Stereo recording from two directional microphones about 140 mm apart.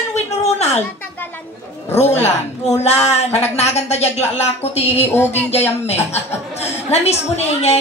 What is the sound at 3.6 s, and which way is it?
A woman's voice, 50° left (ahead or behind).